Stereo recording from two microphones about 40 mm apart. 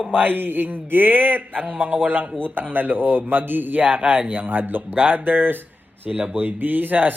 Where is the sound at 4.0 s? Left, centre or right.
Right.